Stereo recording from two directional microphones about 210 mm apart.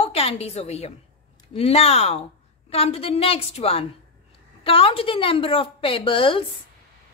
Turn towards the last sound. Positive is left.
turn(degrees=25)  # may be behind; listen again after turning